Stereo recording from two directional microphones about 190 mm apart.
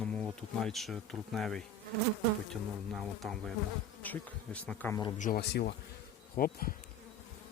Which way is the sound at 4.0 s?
10° left (ahead or behind).